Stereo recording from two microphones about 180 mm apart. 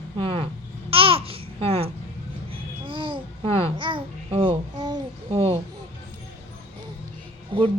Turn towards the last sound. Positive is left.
turn(degrees=-25)  # may be behind; listen again after turning